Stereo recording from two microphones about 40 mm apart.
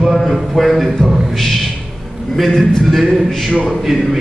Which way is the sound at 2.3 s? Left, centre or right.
Centre.